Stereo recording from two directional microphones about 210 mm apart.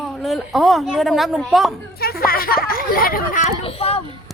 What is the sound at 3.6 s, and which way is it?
Speech, 30° left (ahead or behind).